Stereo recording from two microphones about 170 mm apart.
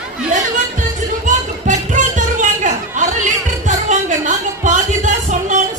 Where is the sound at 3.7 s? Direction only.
45° right (ahead or behind).